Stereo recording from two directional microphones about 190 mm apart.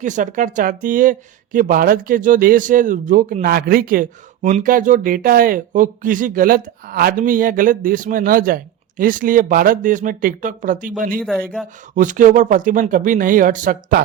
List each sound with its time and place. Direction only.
0.0 s speech: 40° right (ahead or behind)
11.6 s speech: centre (ahead or behind)
11.9 s speech: 45° right (ahead or behind)